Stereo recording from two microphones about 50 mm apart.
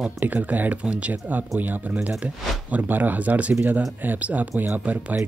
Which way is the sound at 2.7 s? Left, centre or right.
Right.